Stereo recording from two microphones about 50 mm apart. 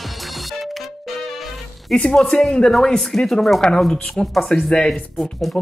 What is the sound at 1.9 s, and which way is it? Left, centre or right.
Speech, centre.